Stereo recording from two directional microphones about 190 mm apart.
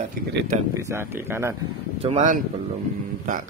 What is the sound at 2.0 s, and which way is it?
Speech, 35° right (ahead or behind).